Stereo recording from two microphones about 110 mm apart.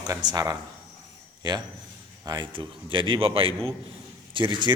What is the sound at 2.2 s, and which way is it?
A man's voice, 40° right (ahead or behind).